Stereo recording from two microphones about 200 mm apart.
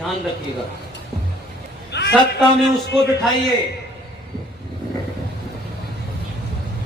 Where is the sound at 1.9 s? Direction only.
55° left (ahead or behind).